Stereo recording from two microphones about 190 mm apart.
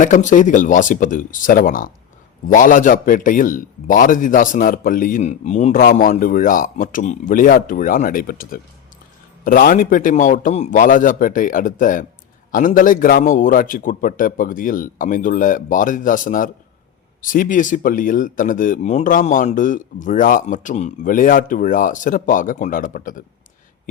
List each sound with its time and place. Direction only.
0.0 s a man's voice: 40° left (ahead or behind)